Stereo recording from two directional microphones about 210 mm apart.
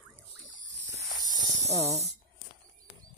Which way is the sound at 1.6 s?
30° right (ahead or behind).